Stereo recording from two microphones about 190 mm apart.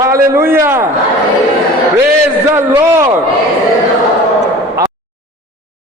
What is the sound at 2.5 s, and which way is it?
Speech, 10° right (ahead or behind).